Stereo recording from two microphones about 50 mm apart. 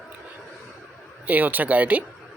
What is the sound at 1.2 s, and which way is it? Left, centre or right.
Speech, right.